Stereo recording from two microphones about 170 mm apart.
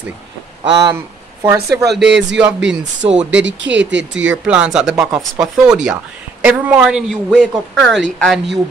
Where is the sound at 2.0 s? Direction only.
90° right.